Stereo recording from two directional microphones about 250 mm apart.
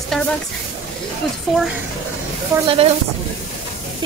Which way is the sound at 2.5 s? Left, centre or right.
Right.